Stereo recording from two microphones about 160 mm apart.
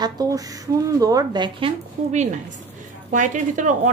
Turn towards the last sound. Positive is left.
turn(degrees=-50)  # may be behind; listen again after turning